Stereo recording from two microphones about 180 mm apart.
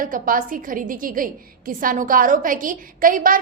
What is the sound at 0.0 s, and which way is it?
A woman's voice, 50° right (ahead or behind).